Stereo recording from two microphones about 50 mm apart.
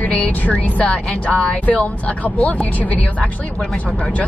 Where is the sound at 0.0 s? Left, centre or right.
Left.